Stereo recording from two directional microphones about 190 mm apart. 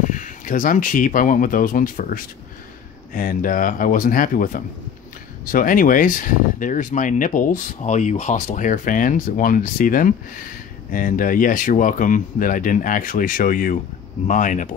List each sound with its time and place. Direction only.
0.1 s speech: 45° left (ahead or behind)